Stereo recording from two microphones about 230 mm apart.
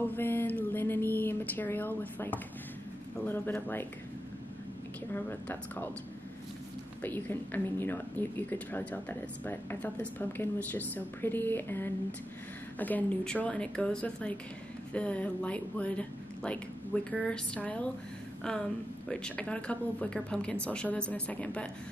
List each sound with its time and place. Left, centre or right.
0.0 s a sound: centre
3.3 s speech: centre
5.1 s speech: centre
7.0 s speech: centre